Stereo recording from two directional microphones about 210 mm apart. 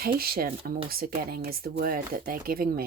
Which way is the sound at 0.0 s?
45° right (ahead or behind).